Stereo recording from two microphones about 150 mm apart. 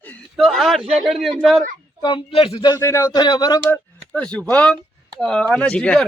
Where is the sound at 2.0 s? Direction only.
35° left (ahead or behind).